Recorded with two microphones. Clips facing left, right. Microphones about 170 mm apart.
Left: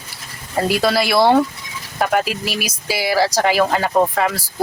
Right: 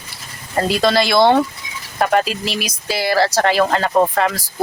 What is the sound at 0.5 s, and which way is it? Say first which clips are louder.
Speech: right 1 dB; 5° left (ahead or behind).